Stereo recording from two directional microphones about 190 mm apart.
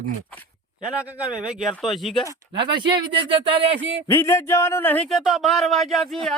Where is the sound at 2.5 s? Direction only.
25° right (ahead or behind).